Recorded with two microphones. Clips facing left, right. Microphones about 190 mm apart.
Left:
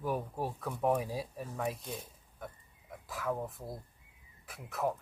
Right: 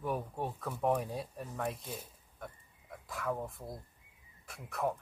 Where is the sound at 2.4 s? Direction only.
Centre (ahead or behind).